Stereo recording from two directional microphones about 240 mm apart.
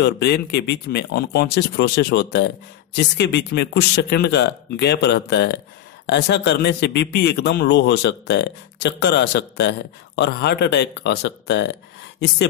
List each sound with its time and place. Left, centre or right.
0.0 s a man's voice: left